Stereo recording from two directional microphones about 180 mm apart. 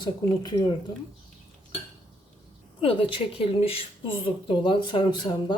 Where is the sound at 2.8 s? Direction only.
30° left (ahead or behind).